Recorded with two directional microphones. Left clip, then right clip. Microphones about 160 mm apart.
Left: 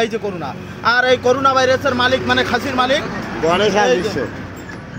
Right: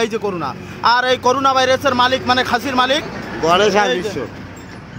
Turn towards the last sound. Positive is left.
turn(degrees=-35)  # may be behind; listen again after turning